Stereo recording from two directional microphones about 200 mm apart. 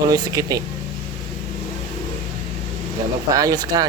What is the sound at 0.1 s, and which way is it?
Speech, 20° right (ahead or behind).